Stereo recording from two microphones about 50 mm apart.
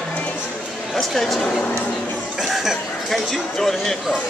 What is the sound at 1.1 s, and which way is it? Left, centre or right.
Speech, centre.